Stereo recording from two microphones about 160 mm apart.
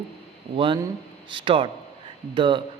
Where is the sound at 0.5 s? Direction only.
30° right (ahead or behind).